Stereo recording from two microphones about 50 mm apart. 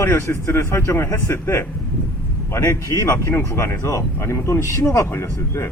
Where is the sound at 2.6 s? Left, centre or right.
Left.